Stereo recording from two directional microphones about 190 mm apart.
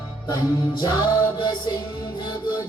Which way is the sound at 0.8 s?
25° left (ahead or behind).